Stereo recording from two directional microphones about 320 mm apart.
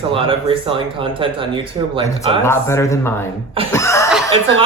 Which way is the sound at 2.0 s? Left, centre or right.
Centre.